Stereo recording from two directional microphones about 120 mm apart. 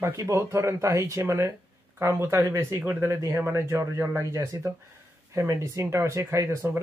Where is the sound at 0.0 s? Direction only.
25° right (ahead or behind).